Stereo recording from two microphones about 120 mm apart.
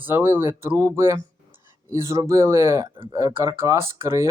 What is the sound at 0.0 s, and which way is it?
Speech, 15° right (ahead or behind).